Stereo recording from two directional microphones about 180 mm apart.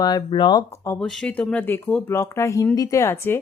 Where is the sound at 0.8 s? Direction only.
5° left (ahead or behind).